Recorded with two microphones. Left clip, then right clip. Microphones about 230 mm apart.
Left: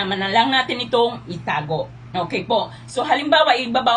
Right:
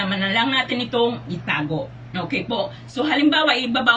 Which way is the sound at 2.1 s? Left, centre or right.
Left.